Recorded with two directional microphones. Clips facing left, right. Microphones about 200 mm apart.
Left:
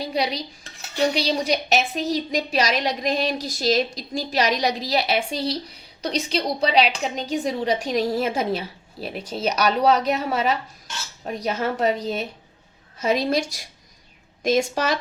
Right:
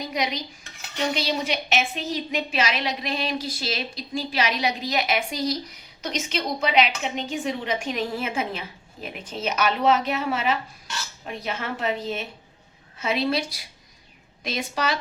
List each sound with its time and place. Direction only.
0.0 s a woman's voice: 35° left (ahead or behind)